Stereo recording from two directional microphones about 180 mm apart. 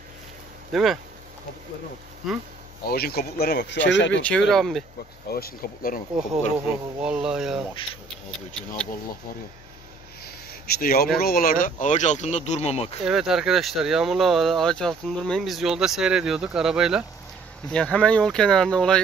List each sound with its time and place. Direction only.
0.7 s speech: centre (ahead or behind)
2.9 s speech: 60° left (ahead or behind); by 4.2 s 80° left
4.2 s speech: 5° left (ahead or behind)
5.3 s speech: 55° left (ahead or behind)
6.6 s speech: 5° right (ahead or behind)
10.8 s speech: 55° left (ahead or behind); by 13.0 s 35° left (ahead or behind)
13.0 s speech: centre (ahead or behind)